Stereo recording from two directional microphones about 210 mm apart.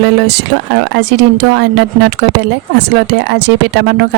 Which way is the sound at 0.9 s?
55° right (ahead or behind).